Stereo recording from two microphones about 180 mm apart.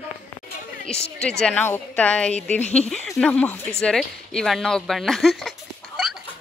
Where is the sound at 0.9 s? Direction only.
5° left (ahead or behind).